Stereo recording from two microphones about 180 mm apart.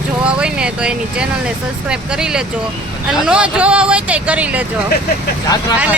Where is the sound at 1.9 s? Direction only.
5° right (ahead or behind).